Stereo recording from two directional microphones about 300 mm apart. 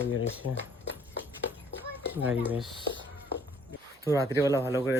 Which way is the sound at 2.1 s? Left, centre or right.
Centre.